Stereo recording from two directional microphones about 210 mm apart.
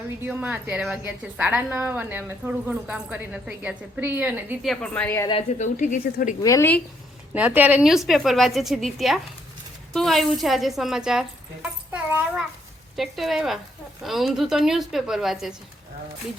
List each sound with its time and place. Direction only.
0.2 s a woman's voice: 5° right (ahead or behind); by 5.3 s 10° left (ahead or behind)
5.3 s speech: 30° left (ahead or behind)
6.4 s a woman's voice: 15° left (ahead or behind)
7.3 s a woman's voice: 5° right (ahead or behind)
11.9 s a sound: 5° right (ahead or behind)
13.0 s a woman's voice: centre (ahead or behind)